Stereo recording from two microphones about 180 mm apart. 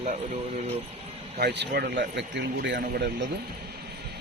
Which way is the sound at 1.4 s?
70° right (ahead or behind).